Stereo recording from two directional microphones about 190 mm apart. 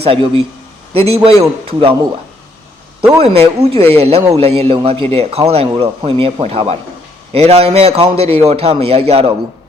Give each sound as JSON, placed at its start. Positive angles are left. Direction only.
{"t": 0.0, "sound": "a man's voice", "side_deg": -30}
{"t": 3.2, "sound": "a man's voice", "side_deg": -30}